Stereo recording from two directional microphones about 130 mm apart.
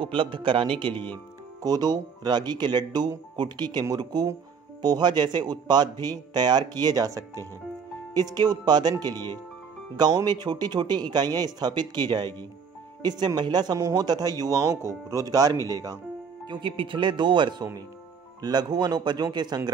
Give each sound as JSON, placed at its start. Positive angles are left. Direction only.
{"t": 0.0, "sound": "speech", "side_deg": -40}
{"t": 16.4, "sound": "speech", "side_deg": -40}